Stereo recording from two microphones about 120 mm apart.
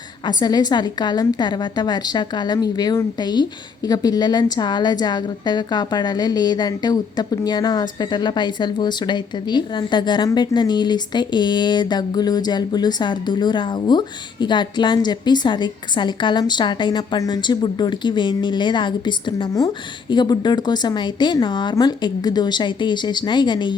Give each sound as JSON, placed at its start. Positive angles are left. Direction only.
{"t": 0.3, "sound": "a woman's voice", "side_deg": 35}